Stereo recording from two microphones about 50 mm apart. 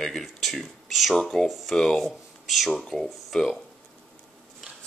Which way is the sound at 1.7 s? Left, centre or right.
Centre.